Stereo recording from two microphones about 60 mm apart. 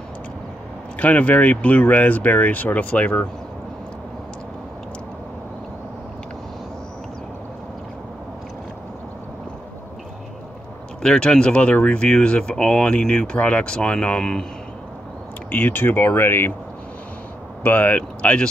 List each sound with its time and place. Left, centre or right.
0.9 s speech: left
11.0 s speech: centre
15.5 s speech: left
17.6 s speech: left